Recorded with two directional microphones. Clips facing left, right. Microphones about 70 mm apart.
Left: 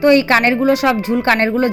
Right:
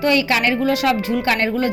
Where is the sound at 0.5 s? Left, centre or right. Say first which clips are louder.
Left 4 dB; left.